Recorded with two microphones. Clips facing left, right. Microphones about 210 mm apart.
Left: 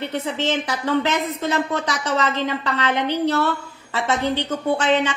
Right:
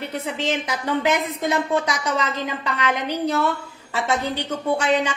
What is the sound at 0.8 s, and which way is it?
Speech, 15° right (ahead or behind).